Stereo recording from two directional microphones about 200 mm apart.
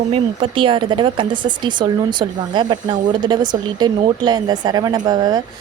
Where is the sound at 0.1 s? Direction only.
25° right (ahead or behind).